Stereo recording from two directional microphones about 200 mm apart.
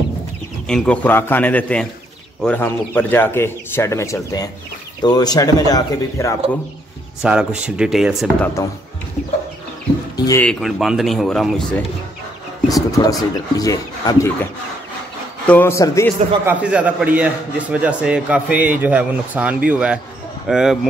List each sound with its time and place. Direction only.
0.7 s a man's voice: 5° left (ahead or behind)
7.2 s speech: 5° right (ahead or behind)
10.1 s a sound: 15° left (ahead or behind)
10.4 s speech: centre (ahead or behind)
12.6 s a man's voice: 15° left (ahead or behind)
16.4 s a man's voice: 5° right (ahead or behind)